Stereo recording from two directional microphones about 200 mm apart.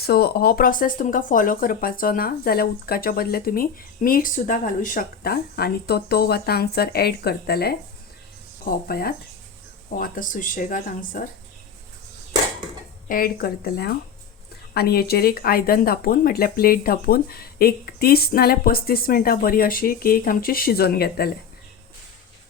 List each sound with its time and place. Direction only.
0.0 s speech: 50° left (ahead or behind)
13.1 s speech: 45° left (ahead or behind)